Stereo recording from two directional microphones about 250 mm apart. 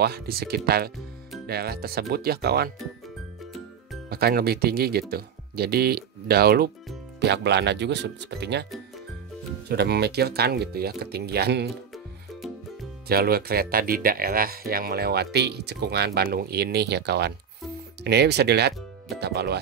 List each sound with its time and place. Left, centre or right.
0.0 s speech: right
4.1 s speech: right
9.7 s speech: right
13.1 s speech: right